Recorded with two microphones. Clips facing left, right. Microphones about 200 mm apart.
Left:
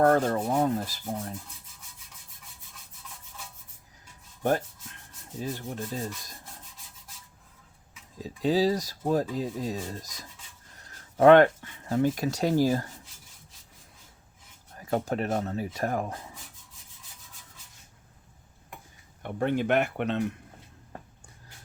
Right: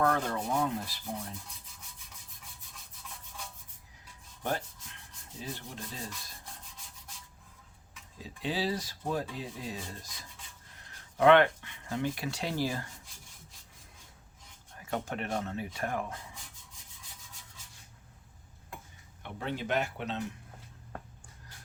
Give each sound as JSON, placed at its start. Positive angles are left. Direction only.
{"t": 0.0, "sound": "rub", "side_deg": 45}
{"t": 5.4, "sound": "rub", "side_deg": 45}
{"t": 8.2, "sound": "speech", "side_deg": 40}
{"t": 11.2, "sound": "speech", "side_deg": 45}
{"t": 14.8, "sound": "speech", "side_deg": 35}
{"t": 19.2, "sound": "speech", "side_deg": 55}